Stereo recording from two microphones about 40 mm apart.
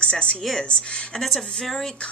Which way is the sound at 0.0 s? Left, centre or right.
Left.